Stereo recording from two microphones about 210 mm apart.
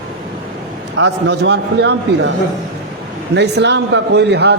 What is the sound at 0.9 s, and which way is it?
A man's voice, 60° right (ahead or behind).